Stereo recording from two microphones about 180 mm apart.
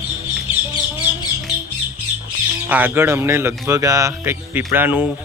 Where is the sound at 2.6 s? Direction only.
10° right (ahead or behind).